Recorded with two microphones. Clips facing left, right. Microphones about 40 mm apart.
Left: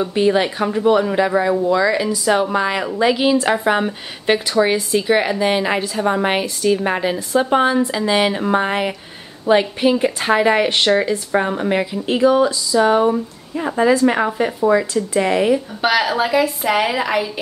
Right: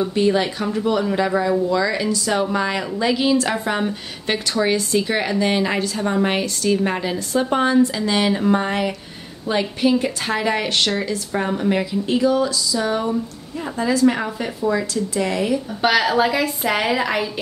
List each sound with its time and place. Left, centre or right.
0.0 s speech: centre
13.1 s speech: left
15.8 s a woman's voice: centre